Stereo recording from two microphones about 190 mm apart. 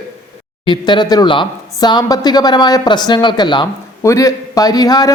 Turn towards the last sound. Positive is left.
turn(degrees=20)  # may be behind; listen again after turning